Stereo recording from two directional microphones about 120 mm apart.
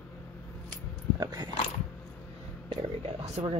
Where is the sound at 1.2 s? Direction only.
30° right (ahead or behind).